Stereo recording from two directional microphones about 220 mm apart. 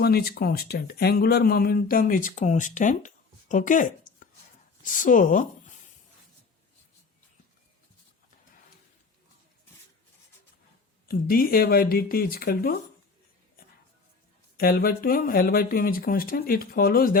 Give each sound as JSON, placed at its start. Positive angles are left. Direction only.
{"t": 0.0, "sound": "speech", "side_deg": 45}
{"t": 3.5, "sound": "a sound", "side_deg": 35}
{"t": 4.8, "sound": "speech", "side_deg": 35}
{"t": 11.1, "sound": "speech", "side_deg": 40}
{"t": 14.5, "sound": "speech", "side_deg": 45}